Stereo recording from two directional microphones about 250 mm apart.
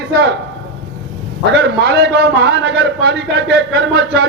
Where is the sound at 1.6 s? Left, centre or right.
Right.